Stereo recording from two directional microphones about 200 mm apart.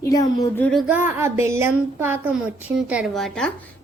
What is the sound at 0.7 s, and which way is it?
Speech, 5° right (ahead or behind).